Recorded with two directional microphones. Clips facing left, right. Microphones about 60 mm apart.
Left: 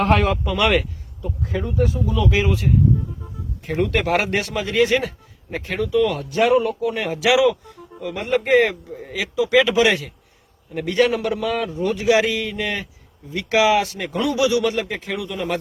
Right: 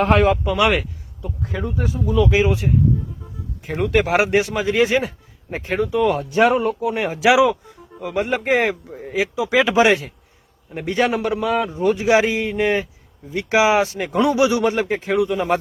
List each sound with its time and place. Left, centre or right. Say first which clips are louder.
0.0 s speech: right 2 dB; centre
3.7 s speech: right 2 dB; centre; by 8.7 s right
8.7 s speech: right 1 dB; centre
9.1 s speech: left 1 dB; right